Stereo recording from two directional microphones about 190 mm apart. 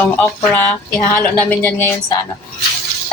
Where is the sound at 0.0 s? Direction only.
5° left (ahead or behind).